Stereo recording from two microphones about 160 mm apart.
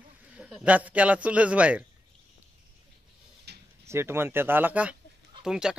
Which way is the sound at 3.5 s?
90° right.